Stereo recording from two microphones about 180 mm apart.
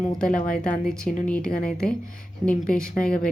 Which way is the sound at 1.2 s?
5° left (ahead or behind).